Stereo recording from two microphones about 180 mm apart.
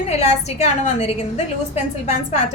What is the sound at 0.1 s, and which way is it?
A woman's voice, 40° left (ahead or behind).